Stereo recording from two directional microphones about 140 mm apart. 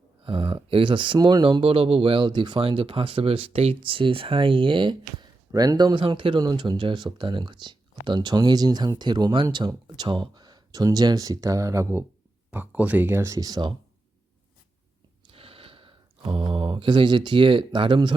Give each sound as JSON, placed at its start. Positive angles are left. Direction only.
{"t": 0.3, "sound": "speech", "side_deg": -35}
{"t": 15.3, "sound": "speech", "side_deg": -40}